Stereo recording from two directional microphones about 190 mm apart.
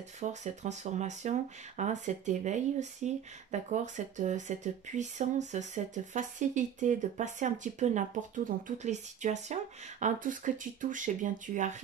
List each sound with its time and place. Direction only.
0.2 s speech: 40° right (ahead or behind)